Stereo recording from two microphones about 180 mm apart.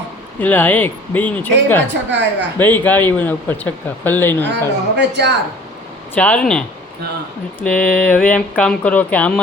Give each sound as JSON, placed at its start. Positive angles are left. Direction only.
{"t": 0.3, "sound": "speech", "side_deg": 10}
{"t": 1.9, "sound": "a woman's voice", "side_deg": -75}
{"t": 2.6, "sound": "speech", "side_deg": 10}
{"t": 4.9, "sound": "a woman's voice", "side_deg": -70}
{"t": 6.1, "sound": "speech", "side_deg": 5}